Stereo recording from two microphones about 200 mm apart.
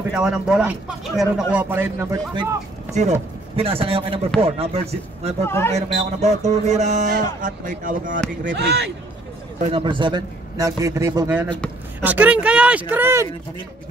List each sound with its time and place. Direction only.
0.1 s a man's voice: 5° right (ahead or behind)
2.9 s a man's voice: 35° right (ahead or behind)
5.4 s speech: 10° left (ahead or behind)
5.8 s speech: 35° right (ahead or behind)
8.5 s speech: 55° right (ahead or behind)
9.7 s a man's voice: 25° right (ahead or behind)